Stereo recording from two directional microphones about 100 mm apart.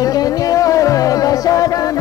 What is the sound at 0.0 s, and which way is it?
Music, 40° left (ahead or behind).